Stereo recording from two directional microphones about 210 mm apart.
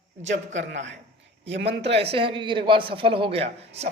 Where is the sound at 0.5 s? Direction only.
60° right (ahead or behind).